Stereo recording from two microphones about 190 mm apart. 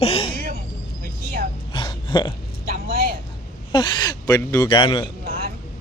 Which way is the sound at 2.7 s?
50° right (ahead or behind).